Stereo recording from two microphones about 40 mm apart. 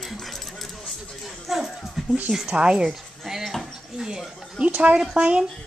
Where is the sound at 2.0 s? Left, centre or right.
Centre.